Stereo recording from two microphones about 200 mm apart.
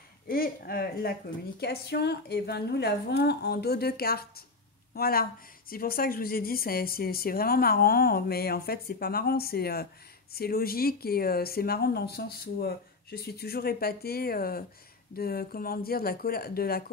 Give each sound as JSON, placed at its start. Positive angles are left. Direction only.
{"t": 0.3, "sound": "a woman's voice", "side_deg": 50}